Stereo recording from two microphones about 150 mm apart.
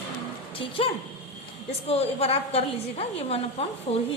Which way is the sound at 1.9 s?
40° left (ahead or behind).